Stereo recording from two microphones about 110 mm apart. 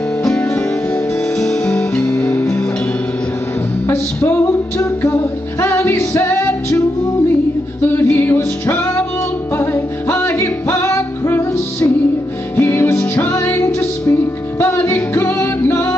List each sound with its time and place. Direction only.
0.2 s music: 5° left (ahead or behind)
3.8 s music: 20° left (ahead or behind)
7.8 s music: 20° left (ahead or behind)